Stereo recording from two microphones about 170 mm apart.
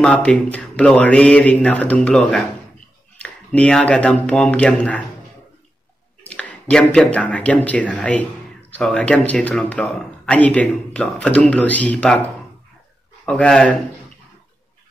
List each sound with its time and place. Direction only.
0.0 s speech: 5° left (ahead or behind)
6.3 s speech: 5° left (ahead or behind)
13.2 s a man's voice: 5° left (ahead or behind)